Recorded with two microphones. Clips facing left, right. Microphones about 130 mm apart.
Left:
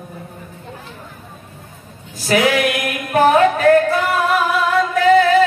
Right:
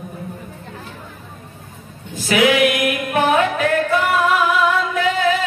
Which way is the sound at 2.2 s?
40° left (ahead or behind).